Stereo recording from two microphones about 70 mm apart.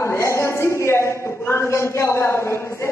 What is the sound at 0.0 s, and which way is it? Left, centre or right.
A woman's voice, left.